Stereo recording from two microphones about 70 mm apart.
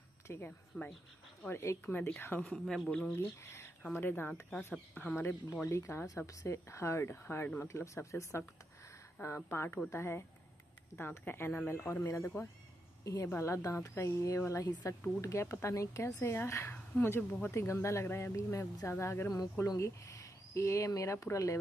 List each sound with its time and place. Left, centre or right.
0.3 s speech: left
0.7 s speech: centre
1.5 s speech: left
2.1 s speech: left
2.6 s speech: centre
3.2 s a sound: left
3.9 s speech: left
4.3 s speech: centre
4.9 s speech: left
5.7 s speech: left
7.7 s speech: left
13.0 s a woman's voice: left
16.7 s a woman's voice: left
17.3 s speech: left